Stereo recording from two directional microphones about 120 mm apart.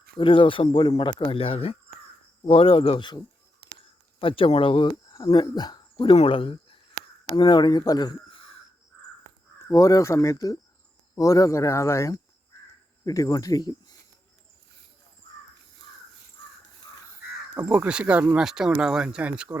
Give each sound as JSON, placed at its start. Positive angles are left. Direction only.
{"t": 0.2, "sound": "speech", "side_deg": 45}
{"t": 4.2, "sound": "speech", "side_deg": 50}
{"t": 6.1, "sound": "speech", "side_deg": 50}
{"t": 8.3, "sound": "caw", "side_deg": 50}
{"t": 9.6, "sound": "speech", "side_deg": 25}
{"t": 17.7, "sound": "speech", "side_deg": -10}